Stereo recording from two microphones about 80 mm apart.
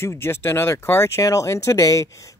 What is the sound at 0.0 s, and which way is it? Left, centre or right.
Speech, left.